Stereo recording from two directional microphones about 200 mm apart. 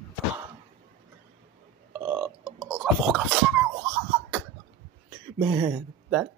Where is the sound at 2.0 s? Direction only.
10° right (ahead or behind).